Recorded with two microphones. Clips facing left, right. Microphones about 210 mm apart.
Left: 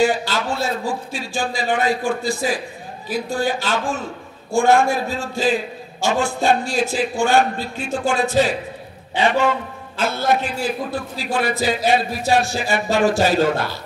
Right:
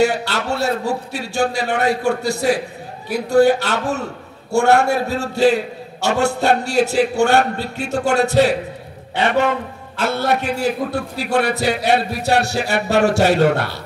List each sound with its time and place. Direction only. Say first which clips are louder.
0.0 s a man's voice: right 1 dB; 70° right (ahead or behind)